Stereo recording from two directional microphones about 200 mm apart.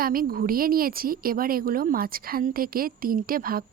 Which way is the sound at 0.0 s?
45° right (ahead or behind).